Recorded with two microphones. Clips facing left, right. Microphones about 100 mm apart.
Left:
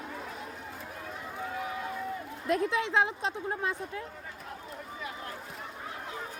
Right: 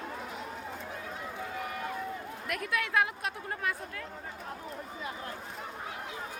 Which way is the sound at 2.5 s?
25° left (ahead or behind).